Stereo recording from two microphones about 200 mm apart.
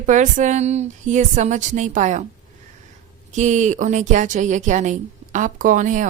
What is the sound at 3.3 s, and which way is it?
Speech, 35° right (ahead or behind).